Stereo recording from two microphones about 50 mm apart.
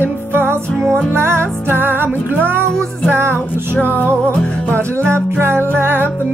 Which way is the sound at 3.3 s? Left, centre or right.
Left.